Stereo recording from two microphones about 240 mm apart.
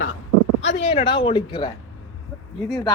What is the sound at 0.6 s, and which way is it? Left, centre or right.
Speech, left.